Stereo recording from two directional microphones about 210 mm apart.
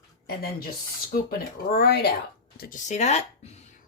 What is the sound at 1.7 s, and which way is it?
Speech, 50° left (ahead or behind).